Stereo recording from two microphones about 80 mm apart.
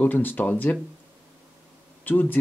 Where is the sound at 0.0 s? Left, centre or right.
Left.